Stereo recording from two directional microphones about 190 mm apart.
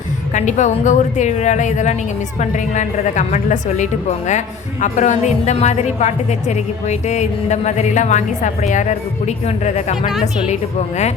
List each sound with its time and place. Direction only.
0.3 s a woman's voice: 40° left (ahead or behind)
10.1 s a woman's voice: centre (ahead or behind)
10.4 s a woman's voice: 35° left (ahead or behind)